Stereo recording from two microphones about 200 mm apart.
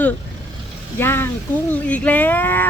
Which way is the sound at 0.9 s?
10° left (ahead or behind).